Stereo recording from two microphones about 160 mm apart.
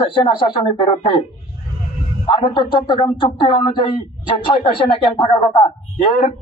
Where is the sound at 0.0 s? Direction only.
30° left (ahead or behind).